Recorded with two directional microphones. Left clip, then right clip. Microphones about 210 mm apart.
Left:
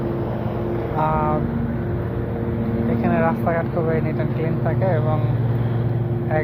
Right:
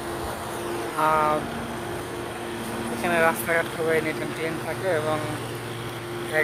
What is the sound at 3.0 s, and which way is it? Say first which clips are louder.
Speech: even; 35° right (ahead or behind).